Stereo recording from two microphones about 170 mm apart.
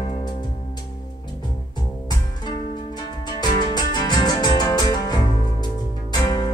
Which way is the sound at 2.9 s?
25° left (ahead or behind).